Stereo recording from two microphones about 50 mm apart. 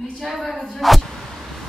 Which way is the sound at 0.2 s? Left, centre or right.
Centre.